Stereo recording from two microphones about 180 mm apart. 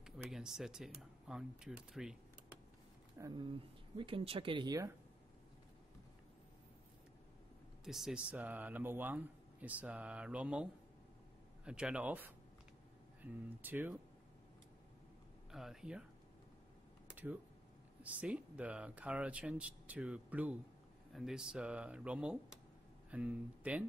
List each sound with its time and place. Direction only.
0.0 s speech: 5° right (ahead or behind)
3.2 s speech: 20° right (ahead or behind)
7.8 s speech: centre (ahead or behind)
15.5 s speech: centre (ahead or behind)
17.1 s a sound: 10° right (ahead or behind)
18.0 s speech: 5° right (ahead or behind)